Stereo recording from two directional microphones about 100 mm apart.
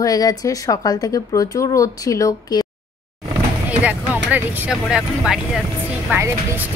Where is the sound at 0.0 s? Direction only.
40° left (ahead or behind).